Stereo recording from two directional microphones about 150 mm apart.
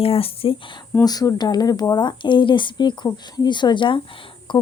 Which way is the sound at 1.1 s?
25° left (ahead or behind).